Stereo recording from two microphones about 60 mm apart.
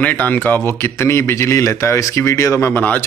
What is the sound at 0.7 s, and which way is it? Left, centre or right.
Speech, left.